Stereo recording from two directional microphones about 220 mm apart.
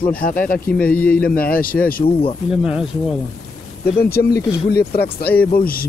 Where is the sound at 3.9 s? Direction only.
45° left (ahead or behind).